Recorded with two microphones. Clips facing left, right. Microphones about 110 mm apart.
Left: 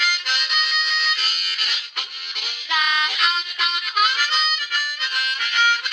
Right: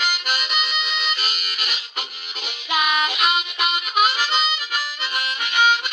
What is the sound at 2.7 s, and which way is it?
Harmonica, 15° right (ahead or behind).